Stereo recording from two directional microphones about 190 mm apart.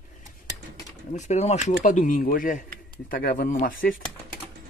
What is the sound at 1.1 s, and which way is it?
Speech, 40° left (ahead or behind).